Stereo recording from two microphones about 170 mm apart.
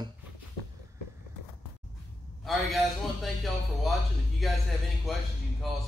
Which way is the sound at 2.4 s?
Centre (ahead or behind).